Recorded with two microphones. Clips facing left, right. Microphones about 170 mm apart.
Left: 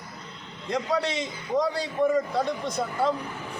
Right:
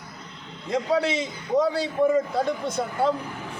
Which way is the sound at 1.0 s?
Centre (ahead or behind).